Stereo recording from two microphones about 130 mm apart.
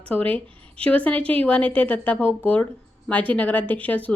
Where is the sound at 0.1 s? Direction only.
10° left (ahead or behind).